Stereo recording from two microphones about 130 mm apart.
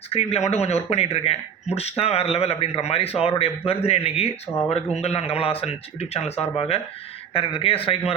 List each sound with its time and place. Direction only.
0.1 s a man's voice: 55° left (ahead or behind)